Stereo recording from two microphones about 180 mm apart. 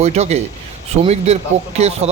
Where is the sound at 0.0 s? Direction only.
40° right (ahead or behind).